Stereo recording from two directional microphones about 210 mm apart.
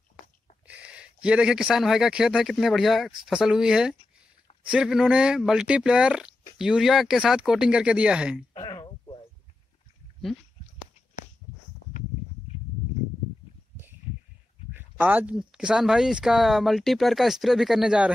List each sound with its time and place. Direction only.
0.7 s speech: 5° right (ahead or behind)
8.5 s a sound: 20° left (ahead or behind)
14.7 s speech: 10° right (ahead or behind)